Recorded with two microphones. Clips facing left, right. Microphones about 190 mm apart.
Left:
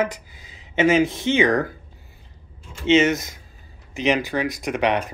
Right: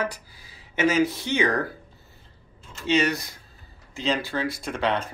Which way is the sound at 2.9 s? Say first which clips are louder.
Left 6 dB; 20° left (ahead or behind).